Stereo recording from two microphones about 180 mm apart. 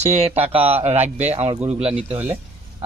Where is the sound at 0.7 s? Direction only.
35° right (ahead or behind).